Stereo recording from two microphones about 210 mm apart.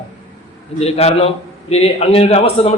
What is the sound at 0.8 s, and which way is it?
A man's voice, 30° left (ahead or behind).